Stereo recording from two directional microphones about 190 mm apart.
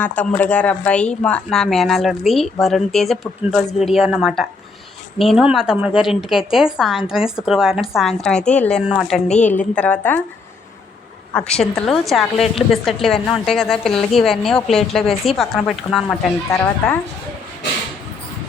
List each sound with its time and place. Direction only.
0.0 s a woman's voice: 5° left (ahead or behind)
9.2 s a woman's voice: 35° left (ahead or behind)
9.5 s a woman's voice: 10° left (ahead or behind)
11.3 s a woman's voice: 5° left (ahead or behind)